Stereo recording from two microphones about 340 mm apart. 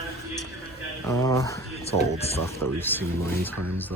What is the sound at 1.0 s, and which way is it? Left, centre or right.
Speech, centre.